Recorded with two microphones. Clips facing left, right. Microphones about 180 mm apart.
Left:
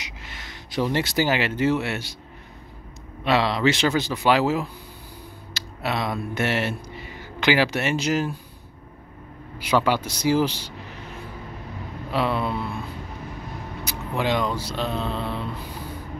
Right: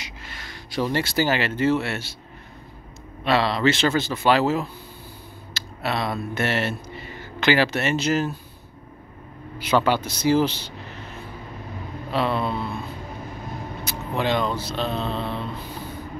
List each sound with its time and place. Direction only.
0.0 s speech: 20° left (ahead or behind)
3.3 s speech: 15° left (ahead or behind)
9.6 s speech: 10° left (ahead or behind)
12.1 s speech: 10° left (ahead or behind)
13.8 s speech: 10° left (ahead or behind)